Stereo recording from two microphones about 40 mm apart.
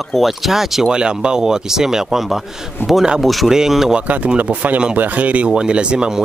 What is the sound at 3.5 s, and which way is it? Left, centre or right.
Speech, centre.